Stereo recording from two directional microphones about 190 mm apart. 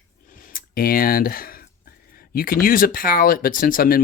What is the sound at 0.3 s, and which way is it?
Speech, 45° left (ahead or behind).